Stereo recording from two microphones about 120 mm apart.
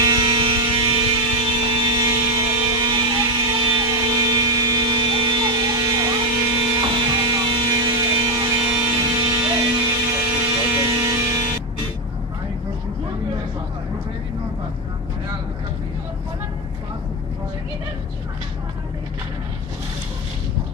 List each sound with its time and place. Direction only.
0.0 s music: 35° right (ahead or behind)
3.6 s a sound: 35° right (ahead or behind)
9.0 s music: 45° right (ahead or behind)